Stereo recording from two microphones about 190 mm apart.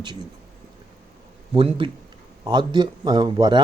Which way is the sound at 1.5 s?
30° right (ahead or behind).